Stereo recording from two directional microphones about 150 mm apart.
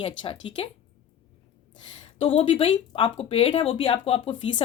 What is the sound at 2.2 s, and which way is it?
Speech, 40° left (ahead or behind).